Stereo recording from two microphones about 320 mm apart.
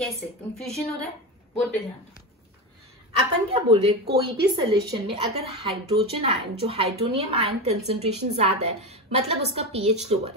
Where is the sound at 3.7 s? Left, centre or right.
Centre.